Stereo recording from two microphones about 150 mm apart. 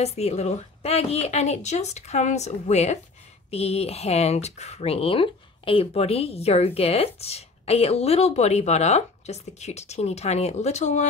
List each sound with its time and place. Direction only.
0.0 s speech: 45° left (ahead or behind)